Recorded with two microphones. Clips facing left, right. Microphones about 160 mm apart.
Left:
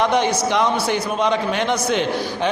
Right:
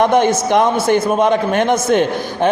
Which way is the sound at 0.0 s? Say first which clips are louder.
Right 5 dB; 50° right (ahead or behind).